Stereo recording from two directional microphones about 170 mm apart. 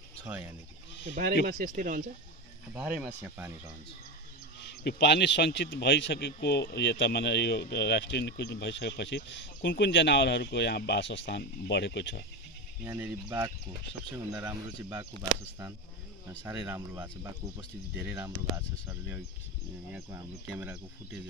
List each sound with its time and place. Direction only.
0.2 s speech: 10° right (ahead or behind)
1.4 s speech: 50° right (ahead or behind)
2.7 s speech: 5° right (ahead or behind)
4.8 s speech: 80° left
12.8 s speech: 15° right (ahead or behind)
14.5 s speech: 20° right (ahead or behind)
16.4 s speech: 10° right (ahead or behind)